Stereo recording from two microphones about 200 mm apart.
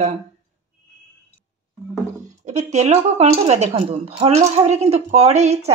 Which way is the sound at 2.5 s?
35° right (ahead or behind).